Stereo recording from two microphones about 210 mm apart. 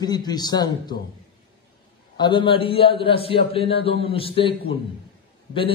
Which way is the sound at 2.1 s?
20° left (ahead or behind).